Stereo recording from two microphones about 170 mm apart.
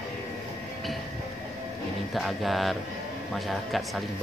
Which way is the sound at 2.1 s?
Centre (ahead or behind).